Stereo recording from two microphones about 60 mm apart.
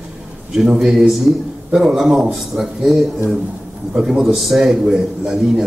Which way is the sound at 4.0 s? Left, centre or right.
Centre.